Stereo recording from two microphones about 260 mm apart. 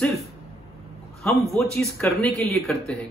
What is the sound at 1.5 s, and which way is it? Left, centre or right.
A man's voice, centre.